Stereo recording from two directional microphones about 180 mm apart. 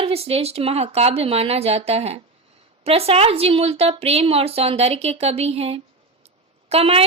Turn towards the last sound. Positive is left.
turn(degrees=-35)  # may be behind; listen again after turning